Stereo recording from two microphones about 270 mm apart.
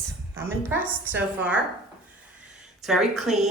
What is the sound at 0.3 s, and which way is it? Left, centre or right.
A woman's voice, centre.